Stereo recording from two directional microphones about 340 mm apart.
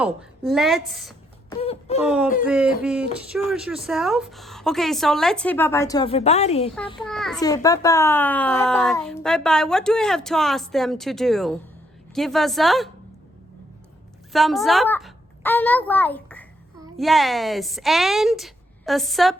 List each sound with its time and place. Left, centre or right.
0.0 s a child's voice: centre
1.5 s a sound: centre
2.0 s a child's voice: centre
7.0 s a child's voice: centre
14.3 s a child's voice: centre